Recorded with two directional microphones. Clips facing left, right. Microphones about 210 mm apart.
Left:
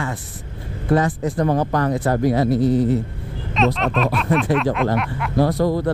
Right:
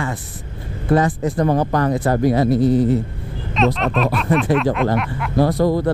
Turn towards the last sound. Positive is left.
turn(degrees=-20)  # may be behind; listen again after turning